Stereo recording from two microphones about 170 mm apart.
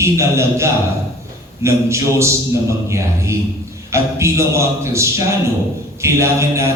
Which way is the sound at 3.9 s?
15° right (ahead or behind).